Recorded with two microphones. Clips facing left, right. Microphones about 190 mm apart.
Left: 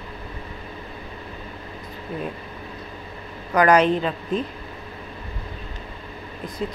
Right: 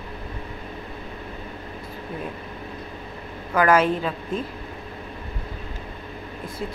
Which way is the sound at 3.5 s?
5° right (ahead or behind).